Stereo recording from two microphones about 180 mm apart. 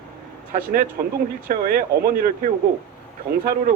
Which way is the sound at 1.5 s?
55° right (ahead or behind).